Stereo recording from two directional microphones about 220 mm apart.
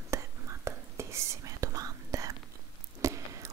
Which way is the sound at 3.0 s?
15° right (ahead or behind).